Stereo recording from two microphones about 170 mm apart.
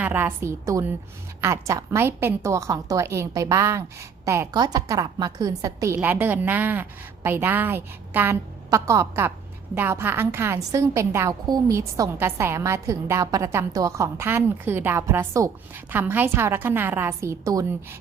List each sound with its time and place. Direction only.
0.0 s a woman's voice: 10° right (ahead or behind)